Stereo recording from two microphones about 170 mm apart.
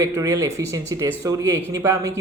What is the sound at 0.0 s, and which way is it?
A man's voice, 20° right (ahead or behind).